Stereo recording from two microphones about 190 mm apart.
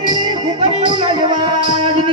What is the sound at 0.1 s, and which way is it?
Music, 20° right (ahead or behind).